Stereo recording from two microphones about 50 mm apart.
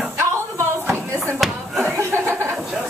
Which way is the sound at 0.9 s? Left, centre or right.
Right.